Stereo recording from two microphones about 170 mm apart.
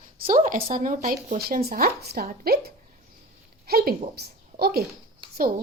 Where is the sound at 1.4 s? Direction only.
60° right (ahead or behind).